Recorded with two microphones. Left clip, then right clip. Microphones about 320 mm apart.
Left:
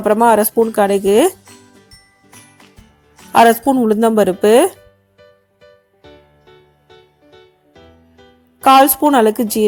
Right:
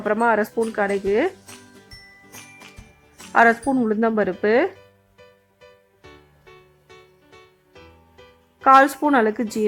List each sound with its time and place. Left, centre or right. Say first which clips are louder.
0.0 s speech: left 8 dB; centre
3.3 s speech: left 6 dB; centre
8.6 s speech: left 5 dB; centre